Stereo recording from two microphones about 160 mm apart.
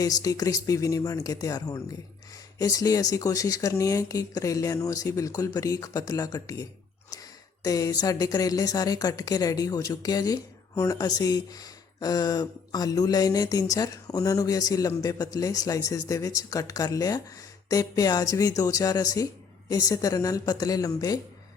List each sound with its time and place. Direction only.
0.0 s speech: 20° left (ahead or behind)